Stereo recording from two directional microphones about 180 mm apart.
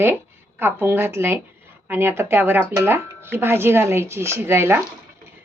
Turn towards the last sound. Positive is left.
turn(degrees=-15)  # may be behind; listen again after turning